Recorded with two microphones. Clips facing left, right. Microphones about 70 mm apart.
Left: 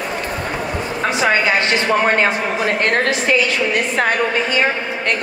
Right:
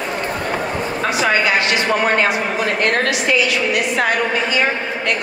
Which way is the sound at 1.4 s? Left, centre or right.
Left.